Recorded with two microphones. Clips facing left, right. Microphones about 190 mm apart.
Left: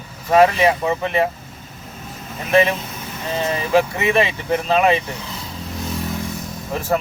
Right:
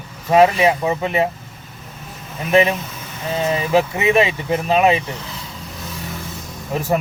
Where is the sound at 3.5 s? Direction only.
15° right (ahead or behind).